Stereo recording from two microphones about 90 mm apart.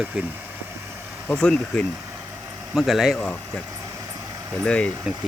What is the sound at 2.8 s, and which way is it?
Speech, 5° right (ahead or behind).